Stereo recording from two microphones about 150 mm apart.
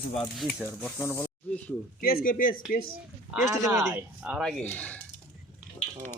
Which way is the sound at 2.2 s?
65° left (ahead or behind).